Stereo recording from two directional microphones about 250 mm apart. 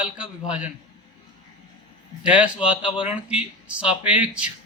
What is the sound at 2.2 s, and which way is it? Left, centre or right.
Speech, centre.